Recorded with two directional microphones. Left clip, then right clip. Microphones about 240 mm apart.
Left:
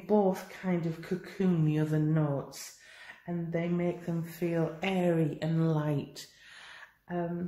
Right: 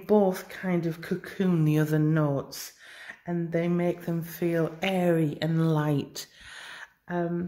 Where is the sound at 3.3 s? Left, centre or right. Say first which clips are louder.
Right 5 dB; right.